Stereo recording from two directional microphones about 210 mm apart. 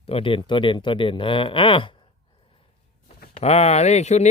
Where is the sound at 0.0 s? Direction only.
25° left (ahead or behind).